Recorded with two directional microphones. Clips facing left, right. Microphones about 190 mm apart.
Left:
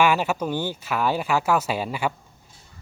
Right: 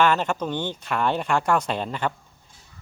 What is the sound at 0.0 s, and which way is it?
Speech, 10° left (ahead or behind).